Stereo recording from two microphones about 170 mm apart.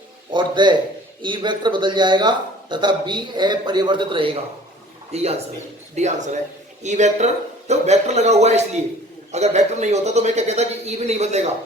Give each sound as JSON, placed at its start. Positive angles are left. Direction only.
{"t": 0.3, "sound": "speech", "side_deg": -25}
{"t": 5.1, "sound": "a man's voice", "side_deg": -40}